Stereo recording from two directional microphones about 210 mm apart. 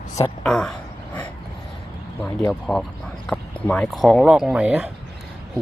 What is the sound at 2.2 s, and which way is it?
Speech, 5° left (ahead or behind).